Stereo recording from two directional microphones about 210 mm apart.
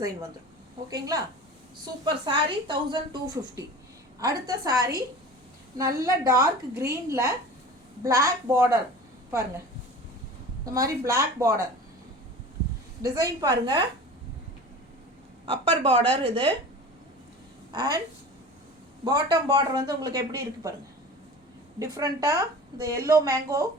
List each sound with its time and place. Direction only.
0.9 s a woman's voice: 15° right (ahead or behind)
10.8 s a woman's voice: 15° right (ahead or behind)
13.0 s a woman's voice: 15° right (ahead or behind)
15.4 s a woman's voice: 25° right (ahead or behind)
17.7 s speech: 20° right (ahead or behind)
19.0 s a woman's voice: 20° right (ahead or behind)
21.9 s a woman's voice: 15° right (ahead or behind)